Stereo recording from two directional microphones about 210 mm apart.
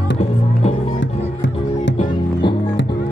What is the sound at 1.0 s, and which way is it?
Music, 60° left (ahead or behind).